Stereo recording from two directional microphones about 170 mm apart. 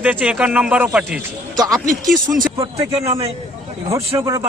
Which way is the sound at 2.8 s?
15° right (ahead or behind).